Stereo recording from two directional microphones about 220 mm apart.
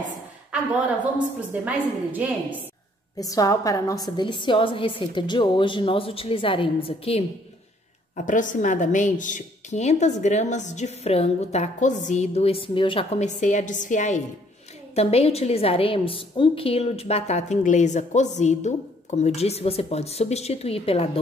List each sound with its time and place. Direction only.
1.5 s a woman's voice: 5° right (ahead or behind)
3.2 s a woman's voice: 15° left (ahead or behind)